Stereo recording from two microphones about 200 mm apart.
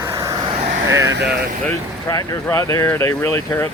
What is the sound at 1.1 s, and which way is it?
Speech, 55° right (ahead or behind).